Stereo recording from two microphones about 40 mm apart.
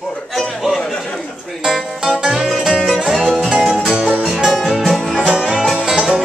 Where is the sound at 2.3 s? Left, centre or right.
Centre.